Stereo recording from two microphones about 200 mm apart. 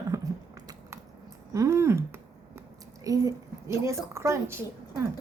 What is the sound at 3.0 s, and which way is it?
A woman's voice, 15° right (ahead or behind).